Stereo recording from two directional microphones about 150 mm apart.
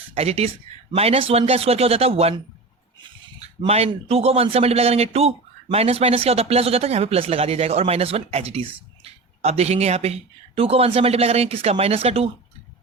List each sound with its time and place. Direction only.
0.1 s speech: 45° right (ahead or behind)
3.7 s speech: 40° right (ahead or behind)